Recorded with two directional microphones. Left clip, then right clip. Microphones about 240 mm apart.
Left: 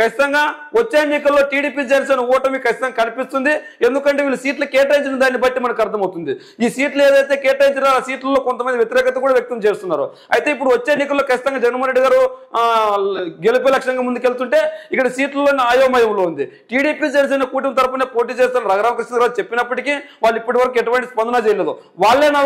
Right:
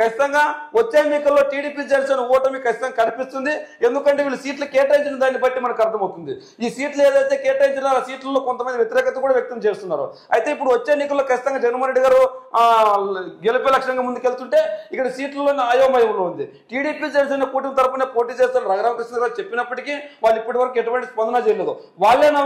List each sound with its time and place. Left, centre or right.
0.0 s speech: left